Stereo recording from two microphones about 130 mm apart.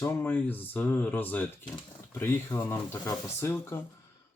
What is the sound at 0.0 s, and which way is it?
Speech, 15° left (ahead or behind).